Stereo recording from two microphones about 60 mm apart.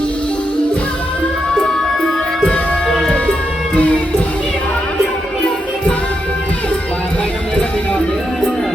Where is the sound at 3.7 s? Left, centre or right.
Left.